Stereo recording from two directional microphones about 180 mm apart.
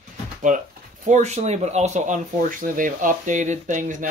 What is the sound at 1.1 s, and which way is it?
Speech, 40° right (ahead or behind).